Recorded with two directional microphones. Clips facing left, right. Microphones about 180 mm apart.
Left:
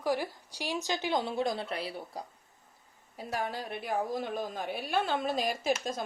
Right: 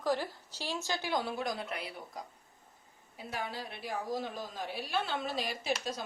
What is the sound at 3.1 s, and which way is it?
A woman's voice, 45° left (ahead or behind).